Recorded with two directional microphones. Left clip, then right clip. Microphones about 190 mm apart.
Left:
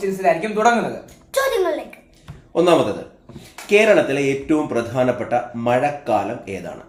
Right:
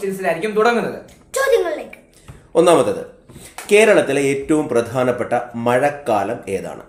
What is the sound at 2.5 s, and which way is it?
A man's voice, 35° right (ahead or behind).